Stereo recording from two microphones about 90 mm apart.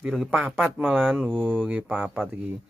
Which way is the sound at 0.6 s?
15° right (ahead or behind).